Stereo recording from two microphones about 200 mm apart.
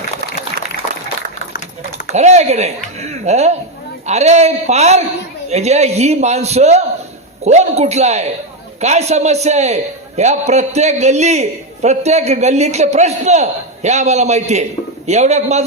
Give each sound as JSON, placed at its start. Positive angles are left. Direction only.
{"t": 2.1, "sound": "a man's voice", "side_deg": -35}